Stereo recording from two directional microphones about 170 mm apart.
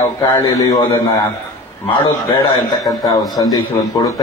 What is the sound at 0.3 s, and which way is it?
Speech, 20° left (ahead or behind).